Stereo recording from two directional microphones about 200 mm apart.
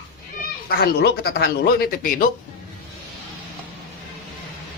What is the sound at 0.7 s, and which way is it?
Speech, 50° left (ahead or behind).